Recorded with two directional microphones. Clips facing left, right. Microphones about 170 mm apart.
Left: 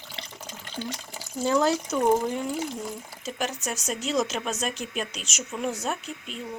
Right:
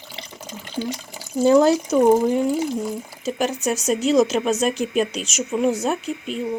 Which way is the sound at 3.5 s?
5° right (ahead or behind).